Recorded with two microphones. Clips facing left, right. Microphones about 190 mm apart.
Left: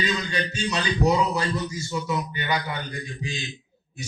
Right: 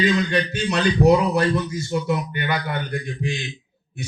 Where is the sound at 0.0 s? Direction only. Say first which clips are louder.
Right 7 dB; 60° right (ahead or behind).